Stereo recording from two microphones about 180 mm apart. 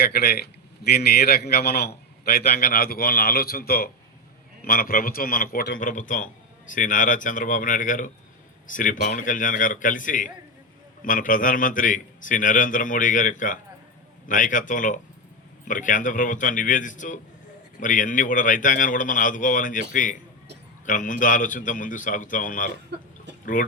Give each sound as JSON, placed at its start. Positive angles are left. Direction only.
{"t": 0.0, "sound": "a man's voice", "side_deg": 60}